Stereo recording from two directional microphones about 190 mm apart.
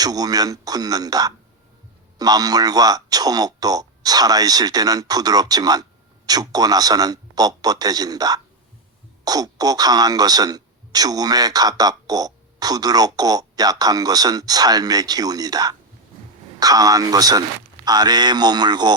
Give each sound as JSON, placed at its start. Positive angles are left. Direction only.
{"t": 0.0, "sound": "speech", "side_deg": -20}